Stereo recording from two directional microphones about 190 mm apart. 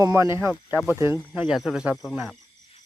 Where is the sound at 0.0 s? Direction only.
15° right (ahead or behind).